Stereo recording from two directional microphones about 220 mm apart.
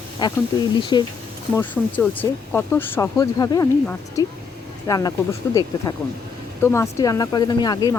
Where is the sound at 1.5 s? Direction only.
10° left (ahead or behind).